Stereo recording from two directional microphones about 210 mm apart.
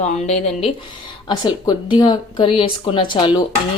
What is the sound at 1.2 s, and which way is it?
A woman's voice, 20° left (ahead or behind).